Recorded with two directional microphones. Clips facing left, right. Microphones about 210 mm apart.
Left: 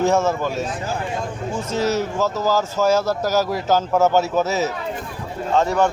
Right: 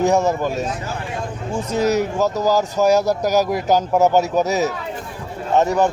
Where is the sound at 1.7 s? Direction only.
15° right (ahead or behind).